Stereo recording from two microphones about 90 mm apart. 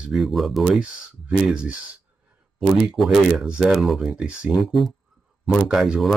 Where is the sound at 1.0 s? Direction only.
10° right (ahead or behind).